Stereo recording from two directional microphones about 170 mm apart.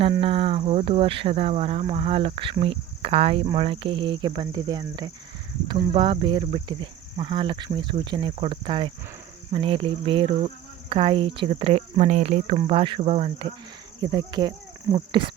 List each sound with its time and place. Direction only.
0.2 s speech: 30° right (ahead or behind)